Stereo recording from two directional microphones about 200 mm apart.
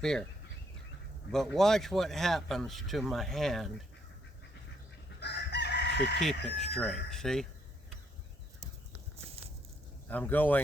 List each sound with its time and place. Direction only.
0.0 s speech: 5° left (ahead or behind)
1.3 s speech: centre (ahead or behind)
5.2 s chicken: 60° left (ahead or behind)
6.1 s speech: centre (ahead or behind)
10.1 s speech: 10° left (ahead or behind)